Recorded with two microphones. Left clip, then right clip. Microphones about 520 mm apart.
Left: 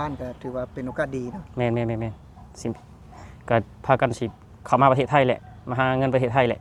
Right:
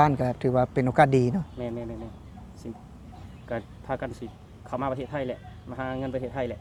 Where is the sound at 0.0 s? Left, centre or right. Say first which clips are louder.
Right 8 dB; right.